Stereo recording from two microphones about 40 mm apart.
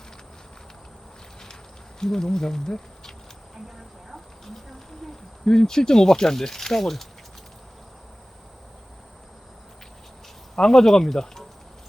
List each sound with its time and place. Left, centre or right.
2.0 s speech: centre
5.5 s speech: centre
10.5 s speech: centre